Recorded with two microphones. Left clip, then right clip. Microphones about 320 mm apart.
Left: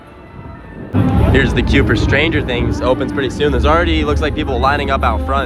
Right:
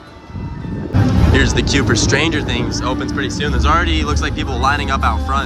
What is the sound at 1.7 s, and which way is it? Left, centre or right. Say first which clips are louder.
Speech: left 2 dB; centre.